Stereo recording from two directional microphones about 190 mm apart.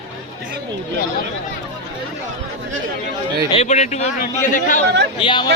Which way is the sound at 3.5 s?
35° left (ahead or behind).